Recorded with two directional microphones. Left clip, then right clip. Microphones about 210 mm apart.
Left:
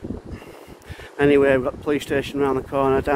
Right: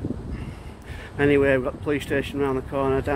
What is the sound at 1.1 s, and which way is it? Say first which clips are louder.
Speech: left 3 dB; 25° left (ahead or behind).